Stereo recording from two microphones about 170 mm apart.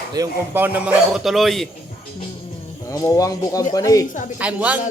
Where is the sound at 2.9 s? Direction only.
20° left (ahead or behind).